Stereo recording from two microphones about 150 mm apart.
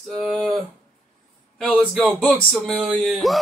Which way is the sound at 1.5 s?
5° left (ahead or behind).